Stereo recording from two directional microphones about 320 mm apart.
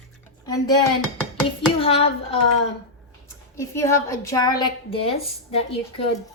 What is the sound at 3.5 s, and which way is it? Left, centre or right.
A woman's voice, centre.